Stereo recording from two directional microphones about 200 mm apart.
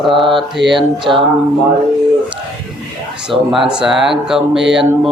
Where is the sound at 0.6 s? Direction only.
60° right (ahead or behind).